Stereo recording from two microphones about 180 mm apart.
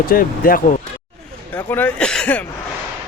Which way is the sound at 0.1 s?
50° left (ahead or behind).